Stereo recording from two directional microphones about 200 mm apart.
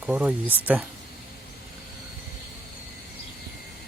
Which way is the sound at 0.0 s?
5° right (ahead or behind).